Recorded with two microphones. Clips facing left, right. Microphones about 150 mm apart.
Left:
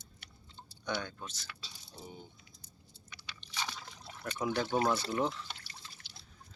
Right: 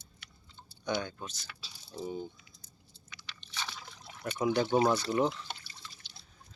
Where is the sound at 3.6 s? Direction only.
5° right (ahead or behind).